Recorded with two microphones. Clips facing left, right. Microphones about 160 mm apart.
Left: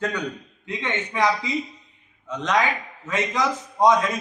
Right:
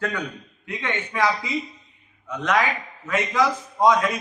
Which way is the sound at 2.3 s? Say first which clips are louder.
Even; 20° left (ahead or behind).